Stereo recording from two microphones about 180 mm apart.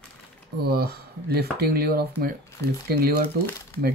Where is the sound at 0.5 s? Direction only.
60° right (ahead or behind).